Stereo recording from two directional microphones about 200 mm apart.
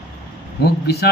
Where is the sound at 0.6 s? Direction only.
55° left (ahead or behind).